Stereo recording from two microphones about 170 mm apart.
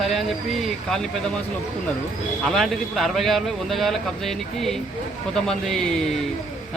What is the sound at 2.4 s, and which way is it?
A man's voice, centre (ahead or behind).